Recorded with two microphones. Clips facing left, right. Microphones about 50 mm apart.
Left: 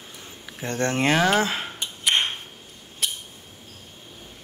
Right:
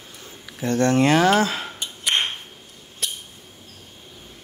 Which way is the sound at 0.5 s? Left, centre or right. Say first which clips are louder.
Right 6 dB; left.